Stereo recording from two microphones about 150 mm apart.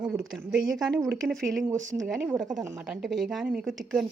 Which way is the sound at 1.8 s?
55° right (ahead or behind).